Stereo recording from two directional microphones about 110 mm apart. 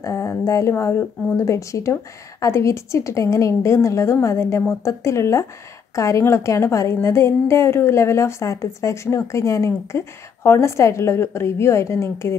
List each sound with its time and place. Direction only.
0.0 s a woman's voice: 25° left (ahead or behind)